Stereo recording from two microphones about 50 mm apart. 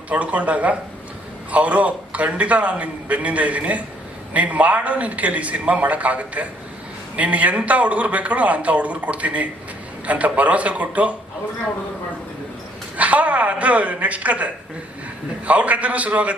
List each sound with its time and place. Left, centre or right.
0.1 s a man's voice: right
13.0 s a man's voice: right